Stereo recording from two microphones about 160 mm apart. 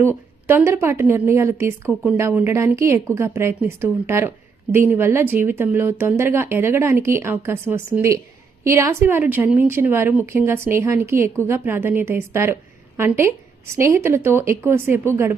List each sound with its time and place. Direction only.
0.0 s a woman's voice: 15° right (ahead or behind)
1.9 s a woman's voice: 5° right (ahead or behind)